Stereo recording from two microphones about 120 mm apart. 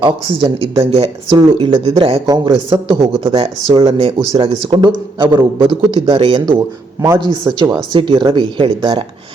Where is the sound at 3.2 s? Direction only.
50° right (ahead or behind).